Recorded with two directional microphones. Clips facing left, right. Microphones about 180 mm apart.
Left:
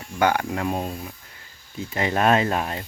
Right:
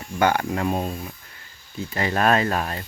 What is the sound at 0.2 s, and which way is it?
Speech, 10° left (ahead or behind).